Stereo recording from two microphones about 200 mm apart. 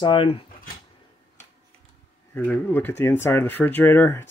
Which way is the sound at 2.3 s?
10° left (ahead or behind).